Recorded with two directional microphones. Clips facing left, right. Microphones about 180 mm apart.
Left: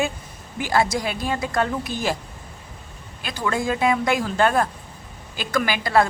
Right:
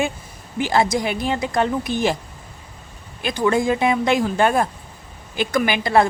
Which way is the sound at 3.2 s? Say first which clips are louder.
Right 6 dB; 20° right (ahead or behind).